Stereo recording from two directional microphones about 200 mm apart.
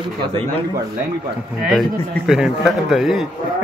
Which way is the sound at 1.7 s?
Centre (ahead or behind).